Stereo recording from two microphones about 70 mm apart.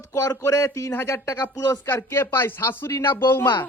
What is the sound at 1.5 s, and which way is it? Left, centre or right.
Speech, left.